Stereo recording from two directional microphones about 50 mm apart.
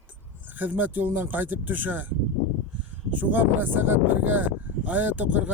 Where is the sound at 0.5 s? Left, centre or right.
Right.